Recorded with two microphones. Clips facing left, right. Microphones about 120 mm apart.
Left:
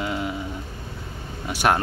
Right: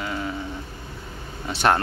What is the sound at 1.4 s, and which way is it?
Speech, 10° left (ahead or behind).